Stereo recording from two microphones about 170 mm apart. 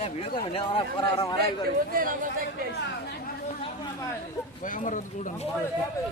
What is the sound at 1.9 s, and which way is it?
Speech, 55° right (ahead or behind).